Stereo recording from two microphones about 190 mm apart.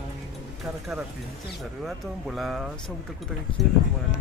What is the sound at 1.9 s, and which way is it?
Speech, centre (ahead or behind).